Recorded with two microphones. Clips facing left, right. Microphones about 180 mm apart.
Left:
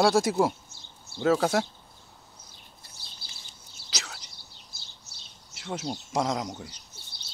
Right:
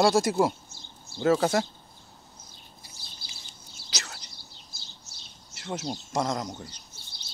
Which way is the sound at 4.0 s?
Centre (ahead or behind).